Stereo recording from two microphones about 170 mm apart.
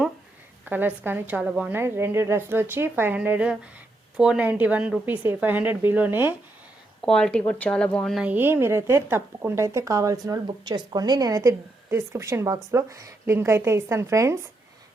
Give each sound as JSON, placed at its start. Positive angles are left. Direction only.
{"t": 0.6, "sound": "speech", "side_deg": -10}
{"t": 7.0, "sound": "speech", "side_deg": 5}
{"t": 8.2, "sound": "speech", "side_deg": -10}